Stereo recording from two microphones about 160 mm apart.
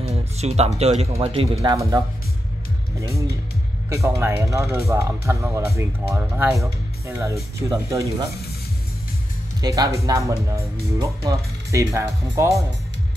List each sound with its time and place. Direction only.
0.0 s speech: 40° right (ahead or behind)
1.6 s speech: 20° right (ahead or behind)
9.6 s speech: 25° right (ahead or behind)